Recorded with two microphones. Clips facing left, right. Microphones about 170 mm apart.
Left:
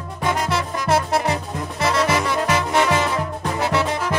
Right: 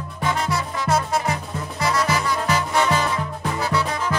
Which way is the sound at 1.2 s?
25° left (ahead or behind).